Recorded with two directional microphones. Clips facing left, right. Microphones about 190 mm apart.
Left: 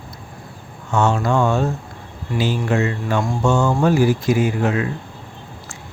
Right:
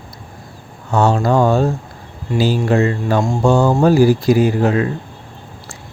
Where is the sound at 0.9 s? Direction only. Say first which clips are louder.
Right 4 dB; 35° right (ahead or behind).